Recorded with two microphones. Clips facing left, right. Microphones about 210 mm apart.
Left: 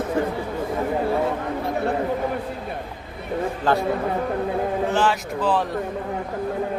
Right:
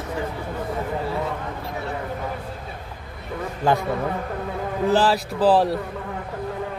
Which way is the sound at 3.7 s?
10° right (ahead or behind).